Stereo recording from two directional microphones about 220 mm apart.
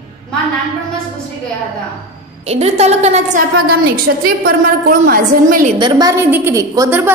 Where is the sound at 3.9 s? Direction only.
45° right (ahead or behind).